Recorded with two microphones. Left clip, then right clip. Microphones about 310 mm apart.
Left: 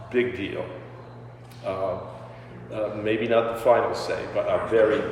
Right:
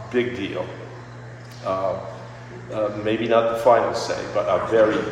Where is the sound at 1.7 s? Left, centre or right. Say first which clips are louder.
Right 4 dB; centre.